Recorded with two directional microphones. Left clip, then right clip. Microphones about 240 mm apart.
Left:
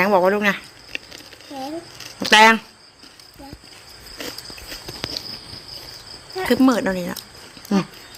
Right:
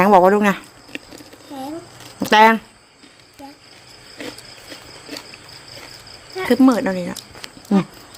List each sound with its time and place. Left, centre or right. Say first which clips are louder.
0.0 s a sound: right 4 dB; right
2.1 s speech: even; centre
4.2 s horse: left 1 dB; centre
6.3 s speech: right 2 dB; centre